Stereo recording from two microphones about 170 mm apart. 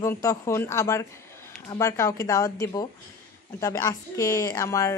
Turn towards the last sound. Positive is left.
turn(degrees=20)  # may be behind; listen again after turning